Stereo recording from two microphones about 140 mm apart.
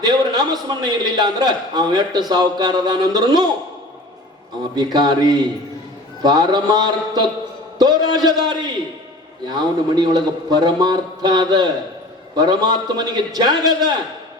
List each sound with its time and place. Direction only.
0.0 s a man's voice: 30° right (ahead or behind)
4.7 s a man's voice: 30° right (ahead or behind)